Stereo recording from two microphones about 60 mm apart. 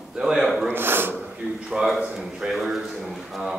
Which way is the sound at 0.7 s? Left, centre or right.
Right.